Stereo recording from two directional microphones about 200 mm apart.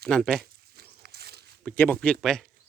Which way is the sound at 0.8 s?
50° right (ahead or behind).